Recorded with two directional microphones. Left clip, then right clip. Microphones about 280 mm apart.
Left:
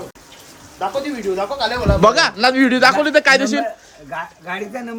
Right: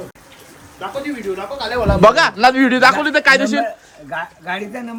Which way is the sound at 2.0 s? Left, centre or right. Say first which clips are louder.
Right 3 dB; centre.